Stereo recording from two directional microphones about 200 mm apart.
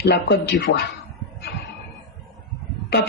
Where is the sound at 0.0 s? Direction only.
55° left (ahead or behind).